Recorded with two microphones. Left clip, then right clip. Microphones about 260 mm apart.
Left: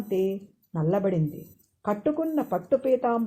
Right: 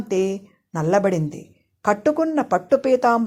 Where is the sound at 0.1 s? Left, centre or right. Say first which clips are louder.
Right 5 dB; right.